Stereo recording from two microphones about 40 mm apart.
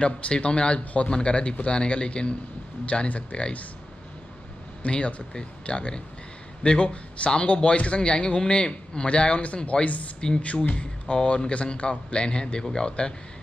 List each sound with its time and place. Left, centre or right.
0.0 s a man's voice: left
4.8 s a man's voice: left
10.4 s a man's voice: left